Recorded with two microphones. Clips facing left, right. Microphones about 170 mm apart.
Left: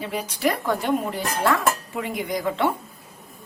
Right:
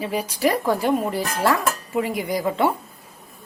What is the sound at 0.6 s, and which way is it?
Speech, 35° right (ahead or behind).